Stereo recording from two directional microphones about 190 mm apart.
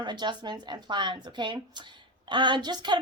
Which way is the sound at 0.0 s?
25° right (ahead or behind).